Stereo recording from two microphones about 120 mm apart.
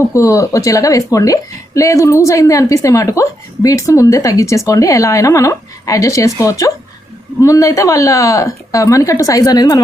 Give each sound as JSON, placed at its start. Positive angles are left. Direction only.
{"t": 0.1, "sound": "a woman's voice", "side_deg": 25}